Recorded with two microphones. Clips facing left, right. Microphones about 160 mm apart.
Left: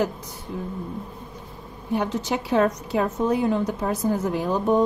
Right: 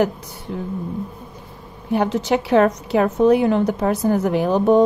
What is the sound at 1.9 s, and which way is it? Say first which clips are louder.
A woman's voice: right 6 dB; 85° right.